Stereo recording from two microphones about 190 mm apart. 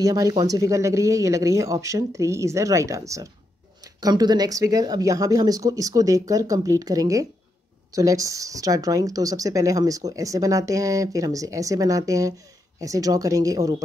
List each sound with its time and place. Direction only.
0.0 s speech: 20° right (ahead or behind)